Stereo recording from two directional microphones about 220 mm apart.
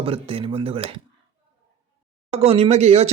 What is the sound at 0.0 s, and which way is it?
Speech, 25° right (ahead or behind).